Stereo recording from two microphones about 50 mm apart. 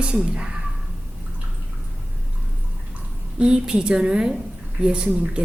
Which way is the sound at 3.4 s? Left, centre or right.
Centre.